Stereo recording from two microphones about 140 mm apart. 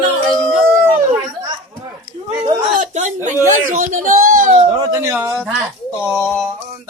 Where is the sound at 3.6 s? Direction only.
75° right (ahead or behind).